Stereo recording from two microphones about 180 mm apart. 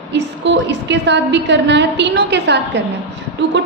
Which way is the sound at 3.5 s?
90° right.